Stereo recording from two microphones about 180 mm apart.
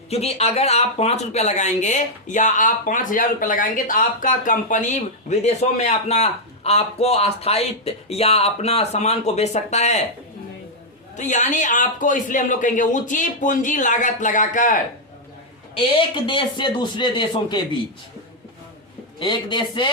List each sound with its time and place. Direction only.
0.1 s speech: 35° left (ahead or behind)
11.2 s speech: 45° left (ahead or behind)
15.8 s speech: 25° left (ahead or behind)
19.2 s speech: 25° left (ahead or behind)